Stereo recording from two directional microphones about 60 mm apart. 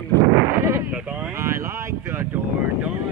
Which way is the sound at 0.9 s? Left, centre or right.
Right.